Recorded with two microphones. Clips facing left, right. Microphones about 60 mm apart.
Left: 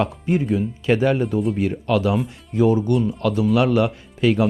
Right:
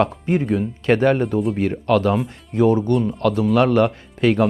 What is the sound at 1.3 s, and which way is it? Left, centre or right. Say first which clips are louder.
Speech: right 1 dB; centre.